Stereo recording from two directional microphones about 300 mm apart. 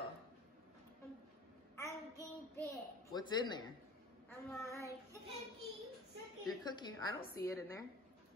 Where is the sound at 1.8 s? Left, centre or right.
Centre.